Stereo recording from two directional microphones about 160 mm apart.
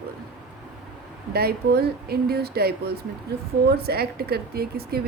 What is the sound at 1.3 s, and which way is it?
A woman's voice, 80° right.